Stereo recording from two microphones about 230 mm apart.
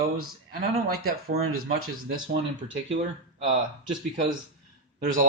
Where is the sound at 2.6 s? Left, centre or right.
Right.